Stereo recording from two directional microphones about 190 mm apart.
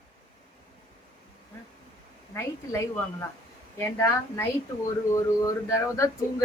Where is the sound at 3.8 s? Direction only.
10° left (ahead or behind).